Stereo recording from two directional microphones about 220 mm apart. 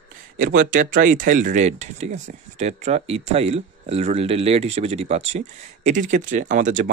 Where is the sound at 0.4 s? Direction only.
40° right (ahead or behind).